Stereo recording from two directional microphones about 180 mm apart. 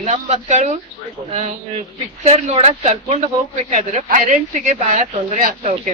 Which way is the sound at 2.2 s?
35° right (ahead or behind).